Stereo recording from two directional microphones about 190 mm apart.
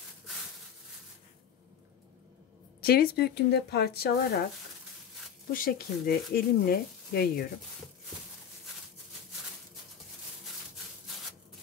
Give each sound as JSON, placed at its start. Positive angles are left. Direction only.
{"t": 2.8, "sound": "a woman's voice", "side_deg": 55}
{"t": 5.5, "sound": "speech", "side_deg": 50}